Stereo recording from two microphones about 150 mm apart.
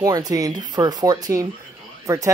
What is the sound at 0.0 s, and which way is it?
Speech, 25° right (ahead or behind).